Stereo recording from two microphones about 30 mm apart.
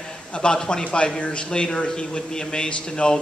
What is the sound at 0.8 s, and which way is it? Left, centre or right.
A man's voice, left.